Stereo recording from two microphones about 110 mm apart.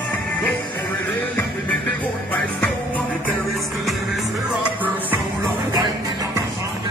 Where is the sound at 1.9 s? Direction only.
10° left (ahead or behind).